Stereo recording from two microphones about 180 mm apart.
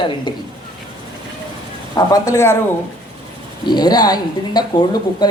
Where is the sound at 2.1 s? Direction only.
20° left (ahead or behind).